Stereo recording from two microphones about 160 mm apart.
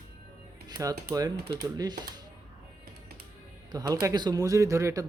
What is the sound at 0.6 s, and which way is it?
Speech, 25° right (ahead or behind).